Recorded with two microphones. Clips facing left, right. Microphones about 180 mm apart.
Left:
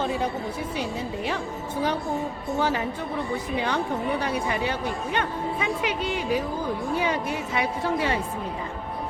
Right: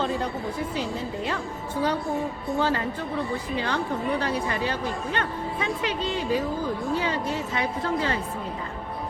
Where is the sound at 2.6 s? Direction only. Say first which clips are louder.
Even; 15° left (ahead or behind).